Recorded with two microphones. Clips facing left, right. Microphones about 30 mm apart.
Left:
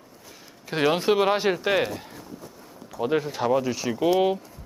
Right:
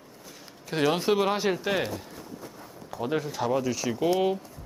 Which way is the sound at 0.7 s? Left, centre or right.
Centre.